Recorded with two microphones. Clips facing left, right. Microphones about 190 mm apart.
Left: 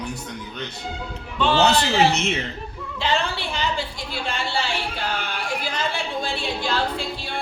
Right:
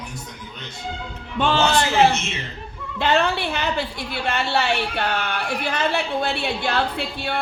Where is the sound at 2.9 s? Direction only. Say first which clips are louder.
Right 5 dB; 60° right (ahead or behind).